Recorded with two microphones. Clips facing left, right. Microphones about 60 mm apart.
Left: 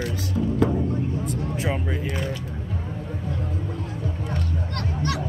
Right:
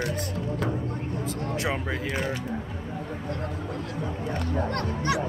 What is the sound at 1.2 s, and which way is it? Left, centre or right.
Speech, right.